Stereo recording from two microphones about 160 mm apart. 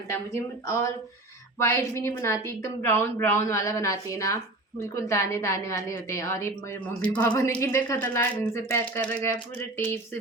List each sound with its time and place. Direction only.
1.5 s a woman's voice: 15° left (ahead or behind)
7.0 s speech: 10° left (ahead or behind)